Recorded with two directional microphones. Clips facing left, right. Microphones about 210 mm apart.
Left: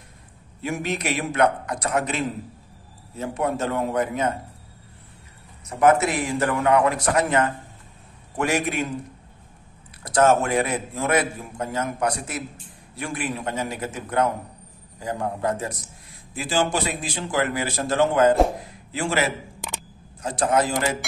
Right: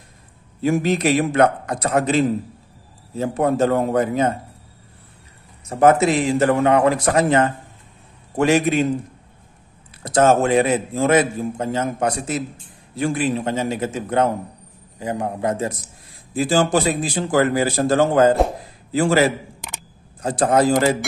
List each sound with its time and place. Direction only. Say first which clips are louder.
0.6 s speech: right 8 dB; 35° right (ahead or behind)
5.7 s a man's voice: right 4 dB; 30° right (ahead or behind)
10.0 s a man's voice: right 3 dB; 25° right (ahead or behind)
16.3 s speech: right 6 dB; 40° right (ahead or behind)